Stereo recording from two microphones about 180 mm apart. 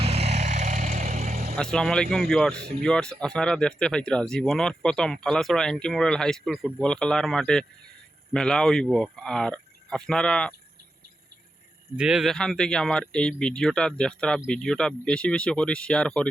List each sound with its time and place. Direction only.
0.0 s vehicle: 35° right (ahead or behind)
1.5 s speech: 5° left (ahead or behind)
11.9 s speech: 5° right (ahead or behind)